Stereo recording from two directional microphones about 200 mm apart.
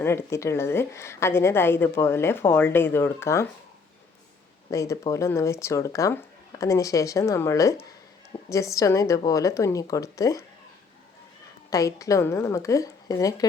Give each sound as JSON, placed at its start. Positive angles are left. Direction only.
{"t": 0.0, "sound": "a woman's voice", "side_deg": 10}
{"t": 4.7, "sound": "a woman's voice", "side_deg": 15}
{"t": 11.7, "sound": "a woman's voice", "side_deg": 15}